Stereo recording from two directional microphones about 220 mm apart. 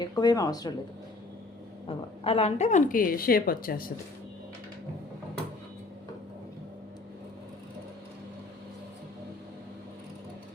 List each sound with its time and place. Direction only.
0.0 s speech: 20° left (ahead or behind)
1.9 s a woman's voice: 25° left (ahead or behind); by 3.9 s 40° left (ahead or behind)